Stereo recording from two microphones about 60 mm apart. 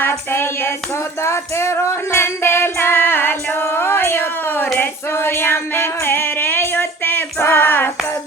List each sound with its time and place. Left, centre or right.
0.0 s child singing: left
1.2 s music: left